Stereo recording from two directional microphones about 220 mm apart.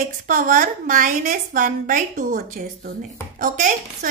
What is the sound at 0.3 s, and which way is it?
Speech, 40° right (ahead or behind).